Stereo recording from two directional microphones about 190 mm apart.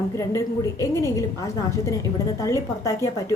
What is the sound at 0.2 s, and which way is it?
A woman's voice, 15° left (ahead or behind).